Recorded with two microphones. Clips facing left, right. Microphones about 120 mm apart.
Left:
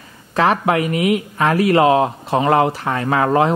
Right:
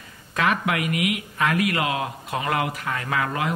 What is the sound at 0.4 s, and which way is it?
A man's voice, 35° left (ahead or behind).